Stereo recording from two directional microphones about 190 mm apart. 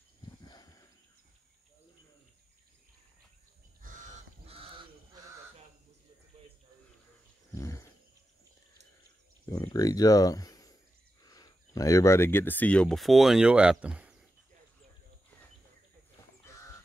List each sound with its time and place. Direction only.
0.2 s a sound: 20° left (ahead or behind)
3.8 s crow: 40° right (ahead or behind)
7.5 s wild animals: 15° left (ahead or behind)
9.5 s speech: 20° left (ahead or behind); by 14.1 s 5° right (ahead or behind)